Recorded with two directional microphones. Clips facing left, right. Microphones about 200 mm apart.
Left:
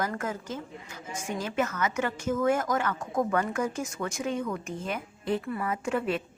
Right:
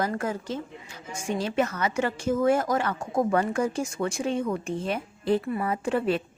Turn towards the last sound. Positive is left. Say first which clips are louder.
# right 3 dB
turn(degrees=-35)  # may be behind; listen again after turning